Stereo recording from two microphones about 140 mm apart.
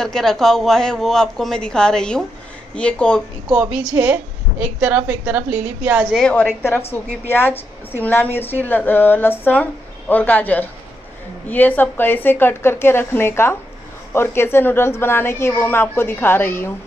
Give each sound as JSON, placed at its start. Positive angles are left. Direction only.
{"t": 0.0, "sound": "a woman's voice", "side_deg": 5}
{"t": 3.4, "sound": "a woman's voice", "side_deg": -10}
{"t": 6.1, "sound": "speech", "side_deg": 10}